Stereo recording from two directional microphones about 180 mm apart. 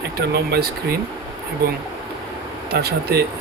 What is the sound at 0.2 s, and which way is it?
Speech, 60° right (ahead or behind).